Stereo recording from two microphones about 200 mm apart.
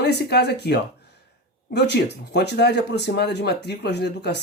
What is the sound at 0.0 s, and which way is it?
Speech, 55° left (ahead or behind).